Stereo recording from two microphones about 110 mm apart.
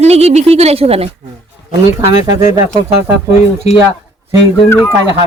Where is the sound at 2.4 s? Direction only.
90° left.